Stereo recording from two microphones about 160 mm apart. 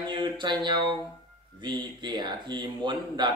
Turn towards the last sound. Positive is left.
turn(degrees=-30)  # may be behind; listen again after turning